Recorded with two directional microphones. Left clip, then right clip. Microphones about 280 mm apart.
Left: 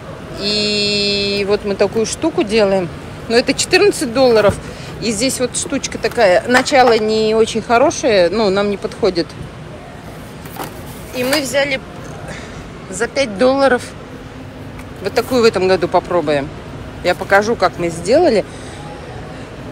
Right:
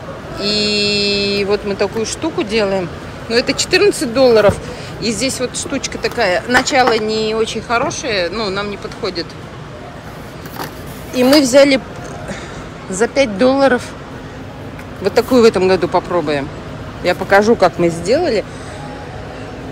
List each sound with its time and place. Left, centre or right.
0.4 s speech: centre
11.1 s speech: centre
13.0 s speech: centre
15.0 s speech: centre